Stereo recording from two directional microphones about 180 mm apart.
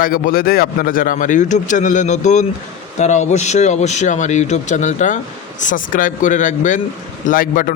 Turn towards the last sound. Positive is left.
turn(degrees=50)  # may be behind; listen again after turning